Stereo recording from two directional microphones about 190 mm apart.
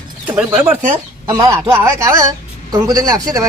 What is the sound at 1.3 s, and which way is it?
A man's voice, 20° right (ahead or behind).